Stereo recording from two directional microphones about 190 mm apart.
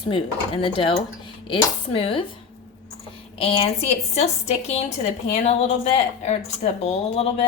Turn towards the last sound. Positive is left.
turn(degrees=35)  # may be behind; listen again after turning